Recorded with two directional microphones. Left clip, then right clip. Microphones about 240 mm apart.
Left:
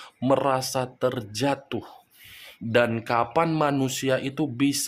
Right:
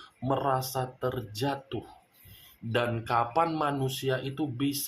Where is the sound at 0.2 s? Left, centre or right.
Left.